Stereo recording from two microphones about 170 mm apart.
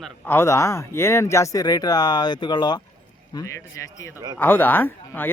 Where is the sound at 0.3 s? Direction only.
15° left (ahead or behind).